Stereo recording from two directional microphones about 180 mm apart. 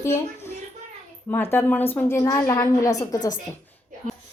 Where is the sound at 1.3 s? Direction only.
10° left (ahead or behind).